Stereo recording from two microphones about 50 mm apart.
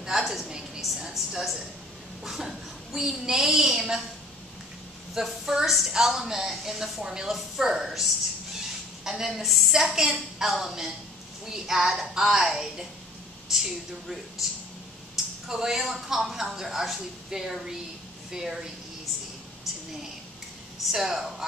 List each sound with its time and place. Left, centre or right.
0.0 s a sound: centre
2.2 s a woman's voice: centre
5.1 s a woman's voice: centre
15.4 s a woman's voice: centre
20.9 s a woman's voice: centre